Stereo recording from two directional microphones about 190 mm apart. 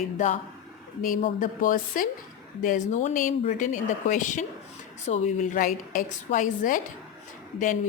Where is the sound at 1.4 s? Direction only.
45° left (ahead or behind).